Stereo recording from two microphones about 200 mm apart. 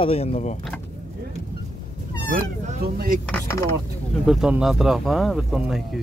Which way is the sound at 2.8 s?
50° right (ahead or behind).